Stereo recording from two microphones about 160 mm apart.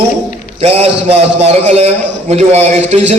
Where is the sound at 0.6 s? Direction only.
40° right (ahead or behind).